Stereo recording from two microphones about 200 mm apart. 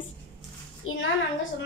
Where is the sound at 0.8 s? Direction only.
90° left.